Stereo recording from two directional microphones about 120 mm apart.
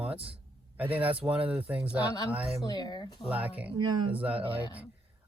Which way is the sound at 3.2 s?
10° right (ahead or behind).